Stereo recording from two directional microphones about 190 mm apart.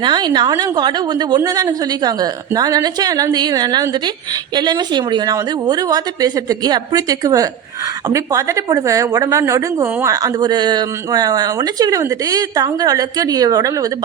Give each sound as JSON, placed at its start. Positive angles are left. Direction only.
{"t": 0.0, "sound": "a woman's voice", "side_deg": -20}